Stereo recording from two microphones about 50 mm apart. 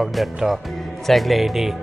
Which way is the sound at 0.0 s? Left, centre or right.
Centre.